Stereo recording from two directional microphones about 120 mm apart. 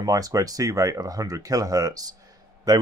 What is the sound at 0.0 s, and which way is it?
Speech, 30° right (ahead or behind).